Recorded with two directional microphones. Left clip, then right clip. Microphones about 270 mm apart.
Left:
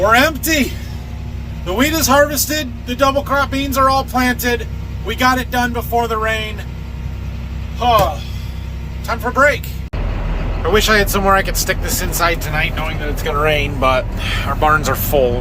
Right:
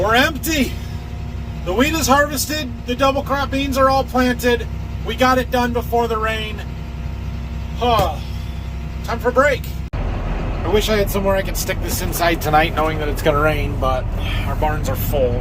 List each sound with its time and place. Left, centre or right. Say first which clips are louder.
0.0 s a man's voice: left 4 dB; centre
7.8 s speech: left 4 dB; centre
9.0 s a man's voice: left 2 dB; centre
10.8 s a man's voice: left 5 dB; centre
12.5 s speech: right 4 dB; centre
13.4 s a man's voice: left 4 dB; centre
15.1 s speech: left 4 dB; left